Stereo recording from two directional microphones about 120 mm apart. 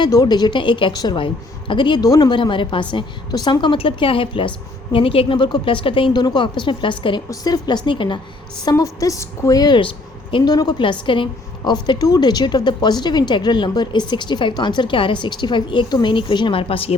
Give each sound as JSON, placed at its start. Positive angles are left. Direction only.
{"t": 0.0, "sound": "a woman's voice", "side_deg": 35}
{"t": 7.3, "sound": "a woman's voice", "side_deg": 30}
{"t": 8.7, "sound": "a woman's voice", "side_deg": 30}